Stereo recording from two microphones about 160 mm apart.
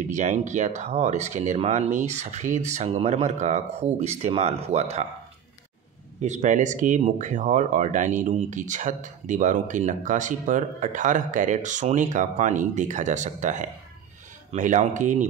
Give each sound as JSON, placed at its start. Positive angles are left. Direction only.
{"t": 0.1, "sound": "speech", "side_deg": -50}
{"t": 6.2, "sound": "speech", "side_deg": -50}